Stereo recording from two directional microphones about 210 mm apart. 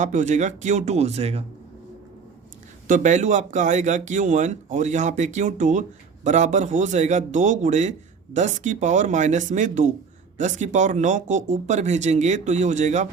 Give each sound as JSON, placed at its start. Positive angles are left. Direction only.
{"t": 0.0, "sound": "a man's voice", "side_deg": -35}
{"t": 2.8, "sound": "a man's voice", "side_deg": -35}